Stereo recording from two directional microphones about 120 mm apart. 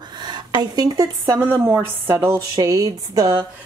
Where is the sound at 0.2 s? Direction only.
40° right (ahead or behind).